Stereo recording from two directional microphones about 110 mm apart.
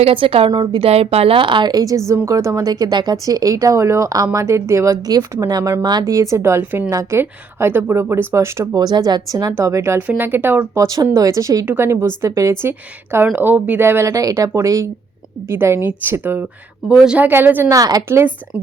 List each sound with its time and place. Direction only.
0.0 s a woman's voice: 55° right (ahead or behind)
0.5 s a woman's voice: 45° right (ahead or behind)
0.8 s a woman's voice: 65° right (ahead or behind); by 6.2 s 35° right (ahead or behind)
6.3 s speech: 25° right (ahead or behind)
8.7 s a woman's voice: 35° right (ahead or behind)
11.6 s speech: 20° right (ahead or behind)
17.7 s a woman's voice: 35° right (ahead or behind)